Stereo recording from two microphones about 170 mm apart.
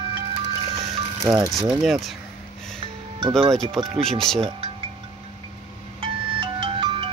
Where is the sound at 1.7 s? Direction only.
Centre (ahead or behind).